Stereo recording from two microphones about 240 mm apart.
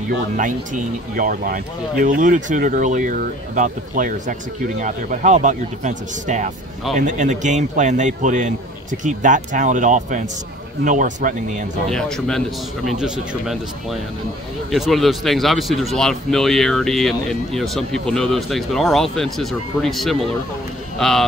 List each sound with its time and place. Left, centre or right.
0.4 s speech: right
11.9 s speech: centre